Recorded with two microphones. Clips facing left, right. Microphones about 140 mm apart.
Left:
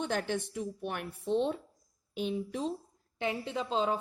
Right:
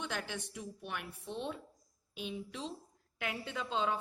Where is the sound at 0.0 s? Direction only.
50° left (ahead or behind).